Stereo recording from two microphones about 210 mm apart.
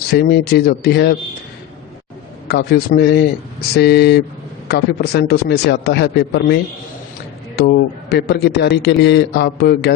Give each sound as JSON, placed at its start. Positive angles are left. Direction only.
{"t": 0.1, "sound": "a man's voice", "side_deg": 50}
{"t": 2.5, "sound": "a man's voice", "side_deg": 50}